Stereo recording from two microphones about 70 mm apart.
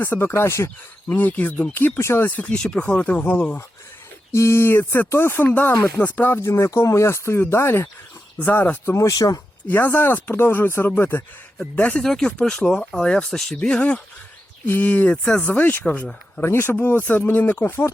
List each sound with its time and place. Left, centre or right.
0.0 s speech: left
1.1 s speech: left
2.0 s speech: left
2.3 s speech: centre
4.3 s speech: left
6.4 s speech: left
8.9 s speech: left
9.1 s speech: left
9.6 s speech: left
11.5 s speech: centre
14.7 s speech: left